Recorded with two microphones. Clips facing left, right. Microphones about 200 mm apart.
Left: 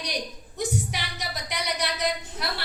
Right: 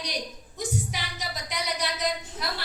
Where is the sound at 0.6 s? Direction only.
65° left (ahead or behind).